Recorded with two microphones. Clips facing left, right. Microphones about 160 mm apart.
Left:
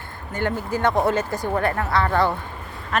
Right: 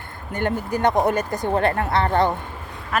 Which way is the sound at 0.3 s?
20° right (ahead or behind).